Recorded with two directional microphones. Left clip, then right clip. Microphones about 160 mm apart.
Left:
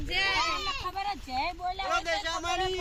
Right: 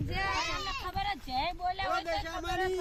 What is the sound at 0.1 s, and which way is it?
Goat, 45° right (ahead or behind).